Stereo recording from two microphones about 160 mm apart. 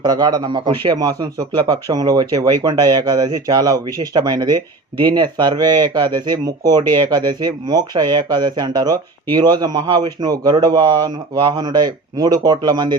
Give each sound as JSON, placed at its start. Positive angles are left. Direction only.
{"t": 0.0, "sound": "speech", "side_deg": -25}